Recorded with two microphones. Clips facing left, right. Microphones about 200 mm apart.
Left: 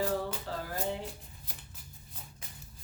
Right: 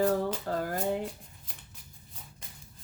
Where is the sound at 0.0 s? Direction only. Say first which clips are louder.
Right 5 dB; 50° right (ahead or behind).